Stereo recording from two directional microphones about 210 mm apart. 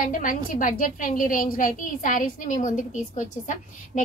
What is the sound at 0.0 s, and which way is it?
A woman's voice, 40° left (ahead or behind).